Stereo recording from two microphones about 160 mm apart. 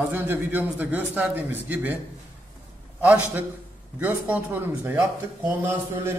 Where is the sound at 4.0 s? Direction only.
10° right (ahead or behind).